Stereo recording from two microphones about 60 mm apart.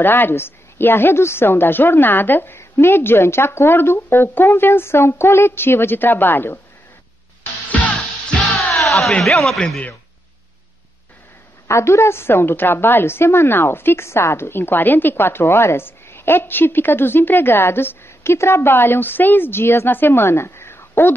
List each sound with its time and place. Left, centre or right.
0.0 s a woman's voice: left
8.7 s a sound: centre
9.2 s a man's voice: centre
11.6 s a woman's voice: left